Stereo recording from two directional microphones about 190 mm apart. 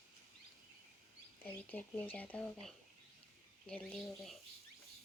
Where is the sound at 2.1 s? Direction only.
5° left (ahead or behind).